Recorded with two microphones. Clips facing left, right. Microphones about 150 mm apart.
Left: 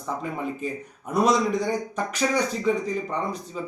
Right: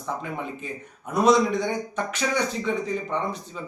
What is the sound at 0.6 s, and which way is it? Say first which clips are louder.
Speech: left 5 dB; 40° left (ahead or behind).